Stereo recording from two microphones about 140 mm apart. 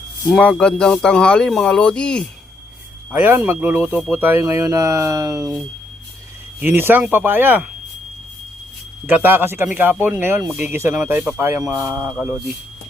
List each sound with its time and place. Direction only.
0.3 s speech: centre (ahead or behind)
3.1 s speech: 15° right (ahead or behind)
6.6 s speech: 15° right (ahead or behind)
9.0 s speech: 15° right (ahead or behind)